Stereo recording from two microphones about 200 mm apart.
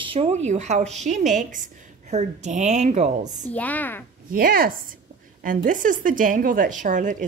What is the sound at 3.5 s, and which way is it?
Speech, 10° left (ahead or behind).